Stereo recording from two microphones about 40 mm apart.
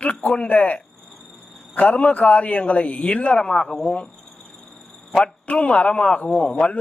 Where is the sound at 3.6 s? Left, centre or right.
Centre.